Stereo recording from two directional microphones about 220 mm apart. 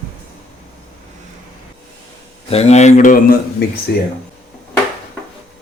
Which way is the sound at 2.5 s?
30° left (ahead or behind).